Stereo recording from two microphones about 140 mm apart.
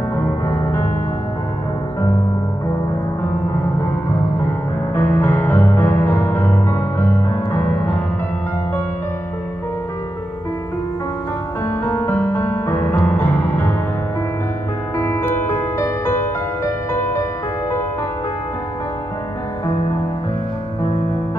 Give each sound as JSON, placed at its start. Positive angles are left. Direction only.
{"t": 4.9, "sound": "music", "side_deg": 15}
{"t": 11.6, "sound": "music", "side_deg": 15}
{"t": 15.0, "sound": "music", "side_deg": 20}